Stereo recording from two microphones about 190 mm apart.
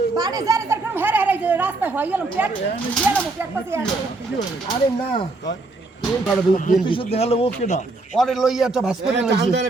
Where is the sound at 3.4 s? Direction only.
10° right (ahead or behind).